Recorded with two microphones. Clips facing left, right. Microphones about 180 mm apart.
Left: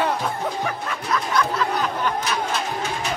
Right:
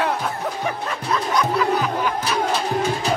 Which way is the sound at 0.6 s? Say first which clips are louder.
Right 2 dB; 20° right (ahead or behind).